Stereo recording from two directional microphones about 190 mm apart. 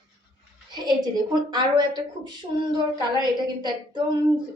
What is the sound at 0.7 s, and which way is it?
A woman's voice, 20° right (ahead or behind).